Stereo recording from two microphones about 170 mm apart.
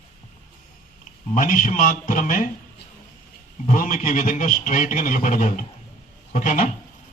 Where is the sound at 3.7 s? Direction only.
50° left (ahead or behind).